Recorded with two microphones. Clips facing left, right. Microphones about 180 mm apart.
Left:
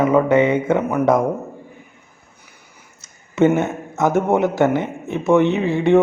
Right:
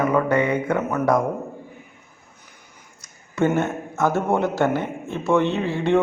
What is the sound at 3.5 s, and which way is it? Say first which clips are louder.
A man's voice: left 3 dB; 15° left (ahead or behind).